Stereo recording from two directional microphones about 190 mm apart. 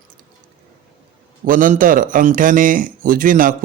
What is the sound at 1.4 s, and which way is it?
A man's voice, 45° right (ahead or behind).